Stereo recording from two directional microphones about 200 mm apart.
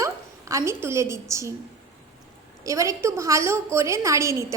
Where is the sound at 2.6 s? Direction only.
15° right (ahead or behind).